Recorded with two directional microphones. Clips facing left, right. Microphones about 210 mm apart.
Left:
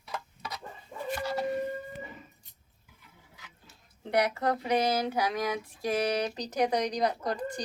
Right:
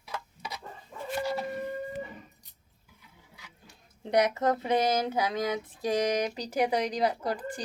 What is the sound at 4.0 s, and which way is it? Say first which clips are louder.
Speech: right 2 dB; 20° right (ahead or behind).